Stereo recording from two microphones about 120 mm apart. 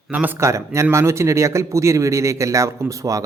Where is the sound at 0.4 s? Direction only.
25° right (ahead or behind).